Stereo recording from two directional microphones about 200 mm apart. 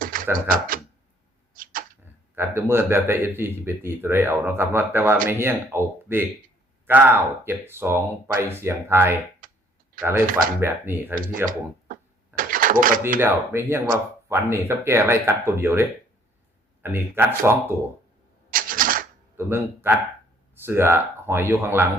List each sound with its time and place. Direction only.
0.0 s a sound: 45° right (ahead or behind)
0.3 s speech: 45° right (ahead or behind)
1.5 s arrow: 45° right (ahead or behind)
2.3 s a man's voice: 10° right (ahead or behind)
9.4 s clicking: 45° right (ahead or behind)
10.0 s speech: 45° right (ahead or behind)
10.6 s a man's voice: 10° right (ahead or behind)
12.4 s cash register: 45° right (ahead or behind)
13.1 s a man's voice: 10° right (ahead or behind)
18.5 s typewriter: 45° right (ahead or behind)
19.4 s a man's voice: 10° right (ahead or behind)